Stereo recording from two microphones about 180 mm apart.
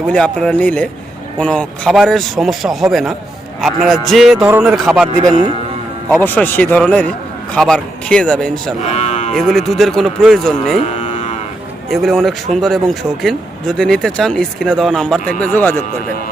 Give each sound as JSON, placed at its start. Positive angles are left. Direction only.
{"t": 0.1, "sound": "speech", "side_deg": 5}
{"t": 6.2, "sound": "speech", "side_deg": 10}
{"t": 8.9, "sound": "moo", "side_deg": 40}
{"t": 9.3, "sound": "speech", "side_deg": 0}
{"t": 11.9, "sound": "speech", "side_deg": 0}